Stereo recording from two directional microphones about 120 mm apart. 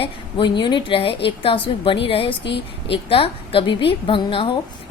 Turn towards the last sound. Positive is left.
turn(degrees=45)  # may be behind; listen again after turning